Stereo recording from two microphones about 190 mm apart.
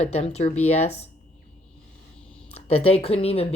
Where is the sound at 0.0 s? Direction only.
35° left (ahead or behind).